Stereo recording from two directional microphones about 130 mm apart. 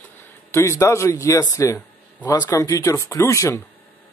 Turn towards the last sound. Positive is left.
turn(degrees=25)  # may be behind; listen again after turning